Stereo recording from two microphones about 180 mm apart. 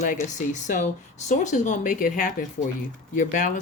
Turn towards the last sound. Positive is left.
turn(degrees=45)  # may be behind; listen again after turning